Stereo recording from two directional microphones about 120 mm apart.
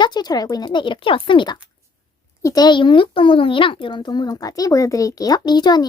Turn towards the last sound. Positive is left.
turn(degrees=35)  # may be behind; listen again after turning